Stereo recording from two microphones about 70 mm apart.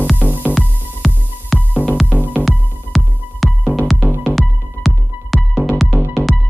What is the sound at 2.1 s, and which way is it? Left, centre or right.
Music, right.